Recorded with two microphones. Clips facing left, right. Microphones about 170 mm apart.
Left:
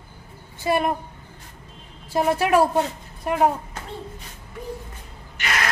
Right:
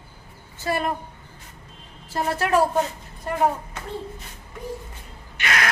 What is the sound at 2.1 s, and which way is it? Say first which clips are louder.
Speech: left 3 dB; 15° left (ahead or behind).